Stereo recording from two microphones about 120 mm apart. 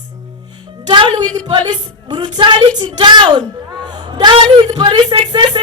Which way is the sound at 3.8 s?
35° right (ahead or behind).